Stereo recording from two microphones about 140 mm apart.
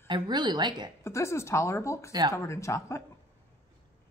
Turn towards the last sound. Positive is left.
turn(degrees=20)  # may be behind; listen again after turning